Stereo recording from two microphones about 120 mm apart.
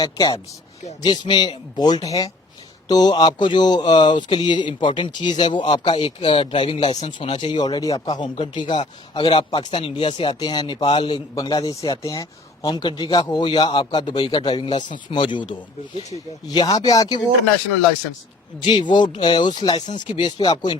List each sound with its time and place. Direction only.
0.0 s speech: 35° left (ahead or behind)
11.3 s speech: 35° left (ahead or behind)
18.6 s speech: 40° left (ahead or behind)